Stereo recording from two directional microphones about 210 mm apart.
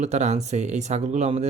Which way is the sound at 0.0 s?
35° right (ahead or behind).